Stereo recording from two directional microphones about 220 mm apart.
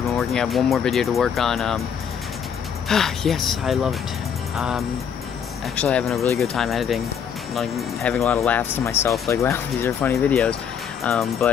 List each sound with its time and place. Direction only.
0.2 s speech: centre (ahead or behind)
2.9 s speech: centre (ahead or behind)